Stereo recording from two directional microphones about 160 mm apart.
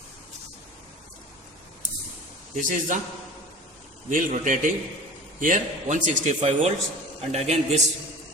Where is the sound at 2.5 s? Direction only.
55° right (ahead or behind).